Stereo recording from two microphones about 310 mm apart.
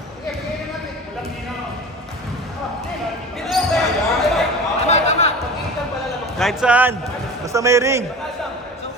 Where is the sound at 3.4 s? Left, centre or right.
Centre.